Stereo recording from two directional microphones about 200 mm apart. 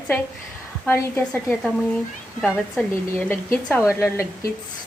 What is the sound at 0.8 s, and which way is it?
Speech, 10° left (ahead or behind).